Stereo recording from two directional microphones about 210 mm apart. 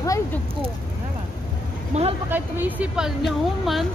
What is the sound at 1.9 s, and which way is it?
Speech, 30° right (ahead or behind).